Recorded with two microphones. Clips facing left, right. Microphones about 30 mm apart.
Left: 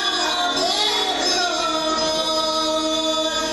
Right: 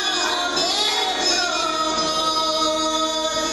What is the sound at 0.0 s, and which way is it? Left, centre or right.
Music, left.